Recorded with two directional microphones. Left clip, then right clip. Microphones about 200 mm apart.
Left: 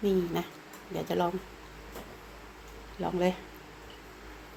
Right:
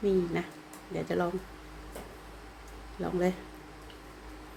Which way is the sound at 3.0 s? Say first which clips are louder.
Left 1 dB; 20° right (ahead or behind).